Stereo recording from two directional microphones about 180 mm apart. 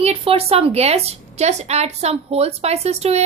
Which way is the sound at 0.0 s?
35° right (ahead or behind).